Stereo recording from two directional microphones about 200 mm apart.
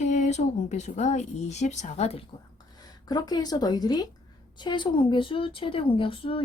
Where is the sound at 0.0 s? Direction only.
35° left (ahead or behind).